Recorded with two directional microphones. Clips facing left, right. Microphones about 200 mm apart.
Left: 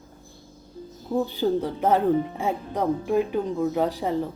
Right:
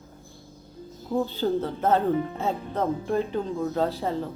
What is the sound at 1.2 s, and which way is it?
A woman's voice, 15° left (ahead or behind).